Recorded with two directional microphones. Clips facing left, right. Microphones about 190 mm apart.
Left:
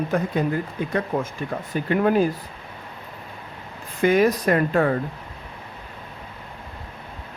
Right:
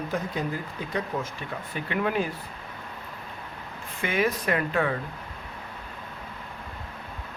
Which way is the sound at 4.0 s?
40° left (ahead or behind).